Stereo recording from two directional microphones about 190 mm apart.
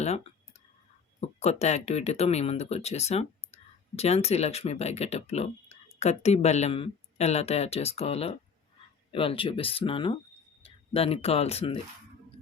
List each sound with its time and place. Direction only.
1.2 s speech: 35° left (ahead or behind)